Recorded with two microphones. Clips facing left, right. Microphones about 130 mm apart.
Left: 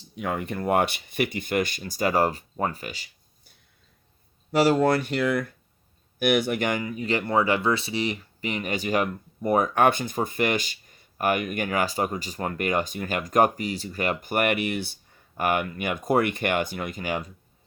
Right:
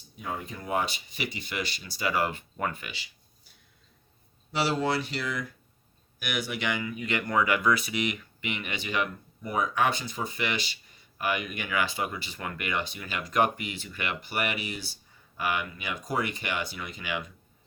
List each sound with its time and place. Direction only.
0.0 s speech: 75° left (ahead or behind); by 3.1 s 40° left (ahead or behind)
4.5 s speech: 45° left (ahead or behind)